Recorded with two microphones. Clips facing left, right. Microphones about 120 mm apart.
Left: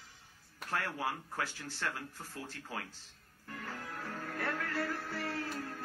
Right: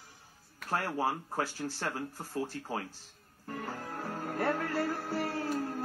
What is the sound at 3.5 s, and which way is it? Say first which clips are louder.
Music: right 5 dB; 35° right (ahead or behind).